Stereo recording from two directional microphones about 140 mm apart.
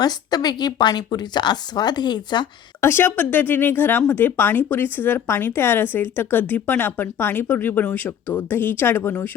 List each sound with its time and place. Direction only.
0.0 s a woman's voice: 30° left (ahead or behind)
2.8 s speech: 15° left (ahead or behind)